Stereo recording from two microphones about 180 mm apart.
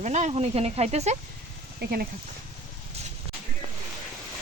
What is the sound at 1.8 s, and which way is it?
Speech, 60° right (ahead or behind).